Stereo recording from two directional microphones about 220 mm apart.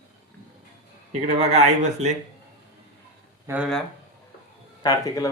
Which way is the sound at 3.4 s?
10° right (ahead or behind).